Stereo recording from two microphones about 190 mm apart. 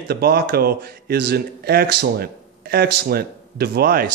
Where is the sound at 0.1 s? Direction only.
55° right (ahead or behind).